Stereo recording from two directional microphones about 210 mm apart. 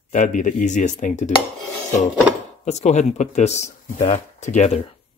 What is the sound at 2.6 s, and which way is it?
Speech, 30° left (ahead or behind).